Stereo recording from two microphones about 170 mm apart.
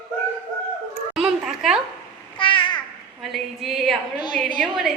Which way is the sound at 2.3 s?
30° left (ahead or behind).